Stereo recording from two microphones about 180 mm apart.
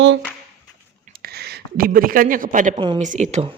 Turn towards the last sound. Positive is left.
turn(degrees=-40)  # may be behind; listen again after turning